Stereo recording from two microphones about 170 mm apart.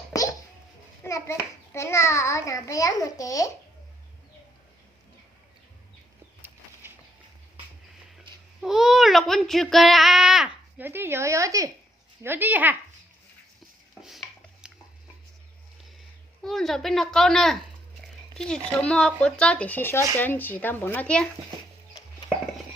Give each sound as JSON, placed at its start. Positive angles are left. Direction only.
{"t": 1.0, "sound": "a child's voice", "side_deg": 15}
{"t": 8.6, "sound": "speech", "side_deg": 0}
{"t": 14.0, "sound": "chopping", "side_deg": 0}
{"t": 16.4, "sound": "speech", "side_deg": 0}